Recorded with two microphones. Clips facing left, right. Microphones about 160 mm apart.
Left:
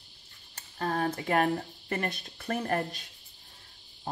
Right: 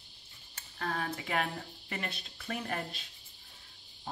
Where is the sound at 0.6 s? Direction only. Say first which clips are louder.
Left 6 dB; 40° left (ahead or behind).